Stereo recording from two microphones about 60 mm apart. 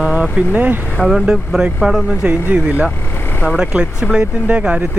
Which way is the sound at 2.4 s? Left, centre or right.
Right.